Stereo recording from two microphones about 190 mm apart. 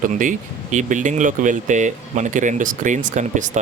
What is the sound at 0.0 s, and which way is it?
Speech, 45° right (ahead or behind).